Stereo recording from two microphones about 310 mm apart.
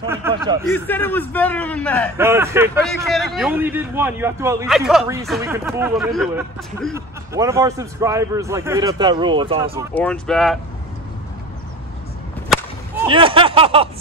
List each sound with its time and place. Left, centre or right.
0.1 s a man's voice: centre
0.7 s a man's voice: centre
2.1 s a man's voice: centre
9.9 s a man's voice: centre
13.1 s a man's voice: centre